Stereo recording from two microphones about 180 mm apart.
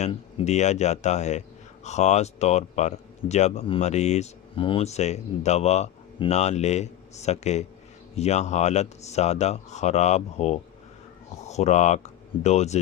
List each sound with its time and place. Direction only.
0.0 s speech: 35° left (ahead or behind)